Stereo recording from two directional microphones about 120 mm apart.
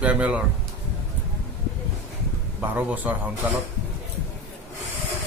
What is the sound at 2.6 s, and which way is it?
Speech, 15° right (ahead or behind).